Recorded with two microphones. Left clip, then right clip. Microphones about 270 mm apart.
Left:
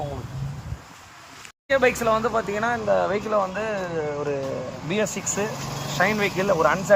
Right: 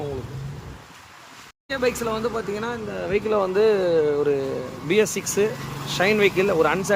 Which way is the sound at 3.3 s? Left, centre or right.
Centre.